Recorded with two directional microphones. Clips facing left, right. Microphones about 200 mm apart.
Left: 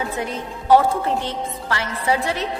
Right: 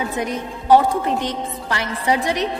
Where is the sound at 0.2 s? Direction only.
15° right (ahead or behind).